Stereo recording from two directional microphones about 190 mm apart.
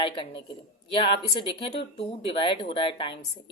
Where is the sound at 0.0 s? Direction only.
25° left (ahead or behind).